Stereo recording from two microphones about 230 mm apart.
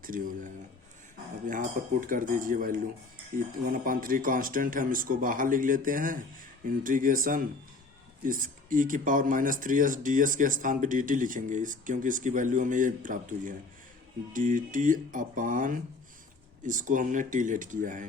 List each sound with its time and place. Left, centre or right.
0.1 s speech: right
1.5 s speech: right